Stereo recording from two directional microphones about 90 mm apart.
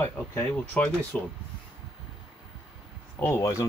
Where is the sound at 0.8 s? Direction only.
15° left (ahead or behind).